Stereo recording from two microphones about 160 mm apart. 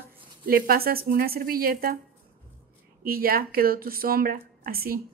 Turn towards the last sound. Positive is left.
turn(degrees=-70)  # may be behind; listen again after turning